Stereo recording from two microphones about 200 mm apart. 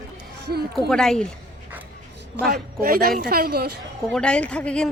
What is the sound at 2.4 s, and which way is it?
Speech, 50° right (ahead or behind).